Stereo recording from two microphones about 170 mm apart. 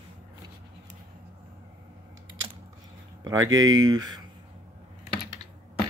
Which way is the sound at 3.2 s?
20° right (ahead or behind).